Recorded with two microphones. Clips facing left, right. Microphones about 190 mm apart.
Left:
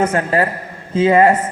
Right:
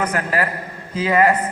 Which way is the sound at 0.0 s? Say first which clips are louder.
Left 5 dB; 25° left (ahead or behind).